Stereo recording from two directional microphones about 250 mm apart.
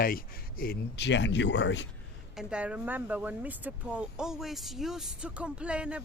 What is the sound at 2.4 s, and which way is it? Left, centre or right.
Speech, centre.